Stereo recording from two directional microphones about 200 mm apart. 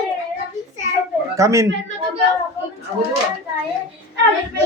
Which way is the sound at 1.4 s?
15° right (ahead or behind).